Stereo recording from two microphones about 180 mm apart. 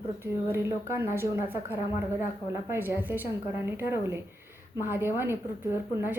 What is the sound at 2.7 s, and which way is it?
A woman's voice, 15° right (ahead or behind).